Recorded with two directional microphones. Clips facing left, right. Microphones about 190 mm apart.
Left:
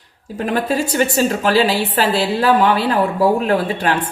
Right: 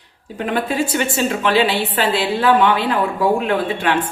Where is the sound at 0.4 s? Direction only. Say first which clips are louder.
Left 1 dB; 40° left (ahead or behind).